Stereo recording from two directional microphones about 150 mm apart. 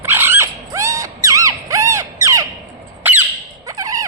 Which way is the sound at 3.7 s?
20° right (ahead or behind).